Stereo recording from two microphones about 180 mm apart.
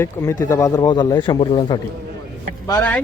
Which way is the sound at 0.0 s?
15° left (ahead or behind).